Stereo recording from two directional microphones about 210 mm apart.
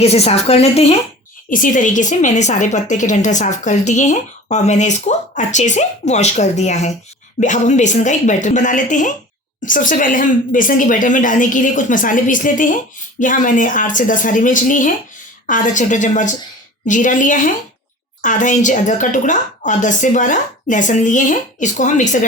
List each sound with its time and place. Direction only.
0.0 s a woman's voice: 30° left (ahead or behind)
1.5 s a woman's voice: 40° left (ahead or behind)